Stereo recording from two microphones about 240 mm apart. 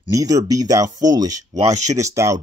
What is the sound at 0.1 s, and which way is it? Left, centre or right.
Speech, centre.